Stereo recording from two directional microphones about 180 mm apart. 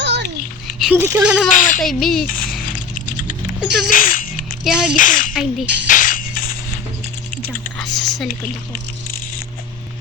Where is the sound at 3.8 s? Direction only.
50° left (ahead or behind).